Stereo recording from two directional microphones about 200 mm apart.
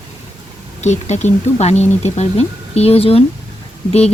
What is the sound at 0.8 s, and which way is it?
Speech, 35° left (ahead or behind).